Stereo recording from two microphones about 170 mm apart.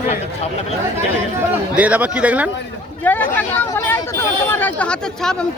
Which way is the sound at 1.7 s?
10° right (ahead or behind).